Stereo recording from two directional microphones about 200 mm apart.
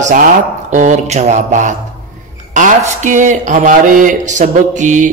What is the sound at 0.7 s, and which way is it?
Speech, 35° right (ahead or behind).